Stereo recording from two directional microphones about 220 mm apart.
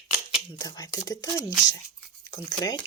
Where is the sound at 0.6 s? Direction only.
15° left (ahead or behind).